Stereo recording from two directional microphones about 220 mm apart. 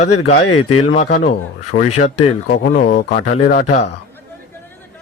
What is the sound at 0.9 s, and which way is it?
Speech, 35° left (ahead or behind).